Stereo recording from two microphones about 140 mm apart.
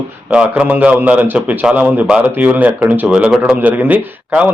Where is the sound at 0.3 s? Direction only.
5° right (ahead or behind).